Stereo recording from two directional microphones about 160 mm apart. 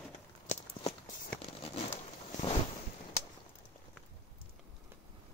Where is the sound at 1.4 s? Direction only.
35° left (ahead or behind).